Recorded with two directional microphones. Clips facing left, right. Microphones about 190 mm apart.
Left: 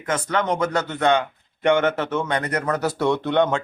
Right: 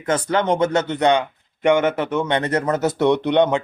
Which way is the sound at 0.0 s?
30° right (ahead or behind).